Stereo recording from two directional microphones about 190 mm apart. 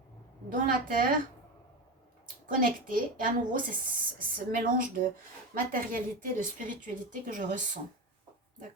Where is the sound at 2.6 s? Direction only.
45° right (ahead or behind).